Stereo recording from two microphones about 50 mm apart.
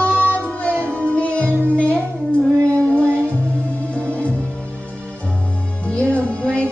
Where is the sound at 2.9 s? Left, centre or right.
Left.